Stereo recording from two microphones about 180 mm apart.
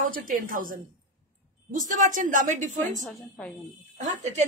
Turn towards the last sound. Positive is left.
turn(degrees=-40)  # may be behind; listen again after turning